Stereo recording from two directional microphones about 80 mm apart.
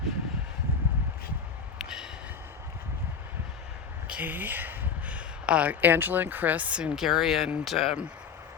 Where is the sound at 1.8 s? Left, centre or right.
Centre.